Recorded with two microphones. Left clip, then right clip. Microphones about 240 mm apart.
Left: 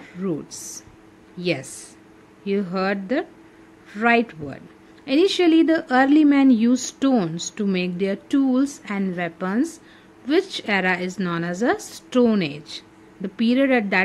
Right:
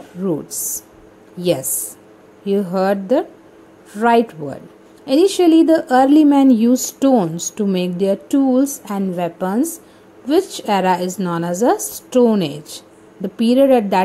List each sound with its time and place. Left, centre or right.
0.0 s a sound: centre
1.4 s speech: centre
2.7 s speech: centre